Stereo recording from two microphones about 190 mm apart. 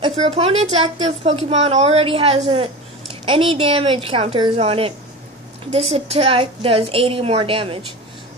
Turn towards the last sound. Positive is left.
turn(degrees=-30)  # may be behind; listen again after turning